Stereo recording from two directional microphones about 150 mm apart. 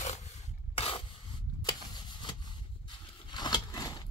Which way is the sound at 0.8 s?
40° left (ahead or behind).